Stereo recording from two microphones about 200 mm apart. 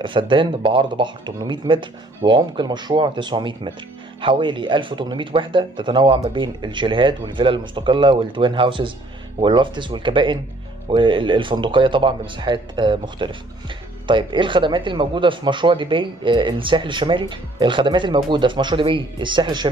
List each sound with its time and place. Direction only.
0.0 s speech: 25° right (ahead or behind)